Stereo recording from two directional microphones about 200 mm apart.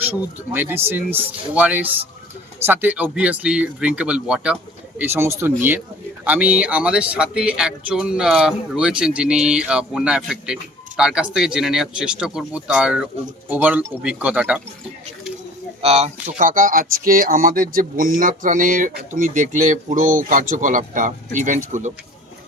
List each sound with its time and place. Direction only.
0.5 s speech: 10° right (ahead or behind)
15.8 s speech: 30° right (ahead or behind)